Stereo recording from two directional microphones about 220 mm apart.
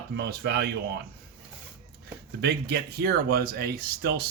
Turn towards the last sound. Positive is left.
turn(degrees=-45)  # may be behind; listen again after turning